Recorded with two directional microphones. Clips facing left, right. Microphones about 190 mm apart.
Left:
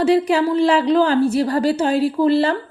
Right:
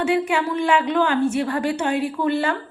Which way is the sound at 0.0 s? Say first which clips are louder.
Left 5 dB; 35° left (ahead or behind).